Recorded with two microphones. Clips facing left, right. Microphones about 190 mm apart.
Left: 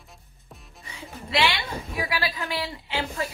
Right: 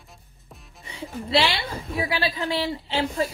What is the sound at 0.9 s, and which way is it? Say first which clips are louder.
A woman's voice: right 5 dB; 30° right (ahead or behind).